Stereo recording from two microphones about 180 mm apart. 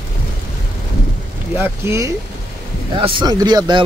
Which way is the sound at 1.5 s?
10° right (ahead or behind).